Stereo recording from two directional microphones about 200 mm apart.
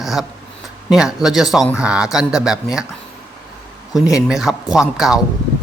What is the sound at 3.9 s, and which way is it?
A man's voice, 5° right (ahead or behind).